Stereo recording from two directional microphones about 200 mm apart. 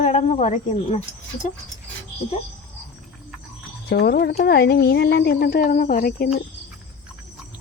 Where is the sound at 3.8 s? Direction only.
55° left (ahead or behind).